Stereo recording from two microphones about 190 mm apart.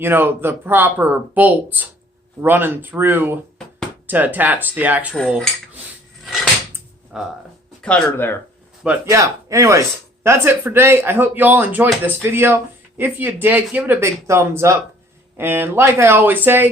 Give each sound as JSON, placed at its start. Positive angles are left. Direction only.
{"t": 0.0, "sound": "speech", "side_deg": -10}
{"t": 5.1, "sound": "cutlery", "side_deg": 0}
{"t": 7.1, "sound": "cutlery", "side_deg": 0}
{"t": 7.8, "sound": "speech", "side_deg": 5}
{"t": 8.8, "sound": "speech", "side_deg": -10}